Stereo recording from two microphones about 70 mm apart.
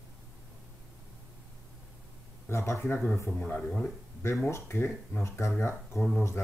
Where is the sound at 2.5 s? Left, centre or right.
Left.